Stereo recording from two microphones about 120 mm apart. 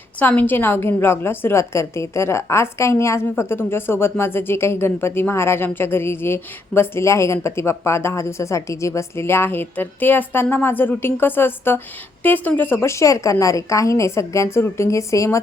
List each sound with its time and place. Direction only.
0.2 s a woman's voice: 15° left (ahead or behind)